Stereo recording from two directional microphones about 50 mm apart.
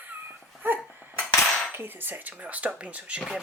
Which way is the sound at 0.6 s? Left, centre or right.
Right.